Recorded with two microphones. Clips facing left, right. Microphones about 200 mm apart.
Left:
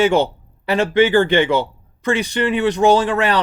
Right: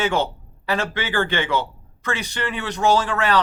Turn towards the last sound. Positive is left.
turn(degrees=20)  # may be behind; listen again after turning